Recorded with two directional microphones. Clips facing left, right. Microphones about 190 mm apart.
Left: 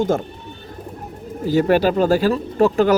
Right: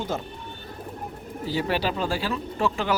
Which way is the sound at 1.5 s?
45° left (ahead or behind).